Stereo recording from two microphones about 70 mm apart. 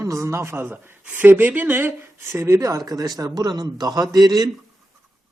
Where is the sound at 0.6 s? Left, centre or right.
Right.